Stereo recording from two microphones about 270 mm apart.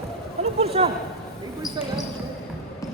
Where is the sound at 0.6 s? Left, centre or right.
Right.